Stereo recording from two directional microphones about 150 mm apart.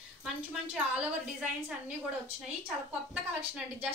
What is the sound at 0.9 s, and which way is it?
A woman's voice, 5° right (ahead or behind).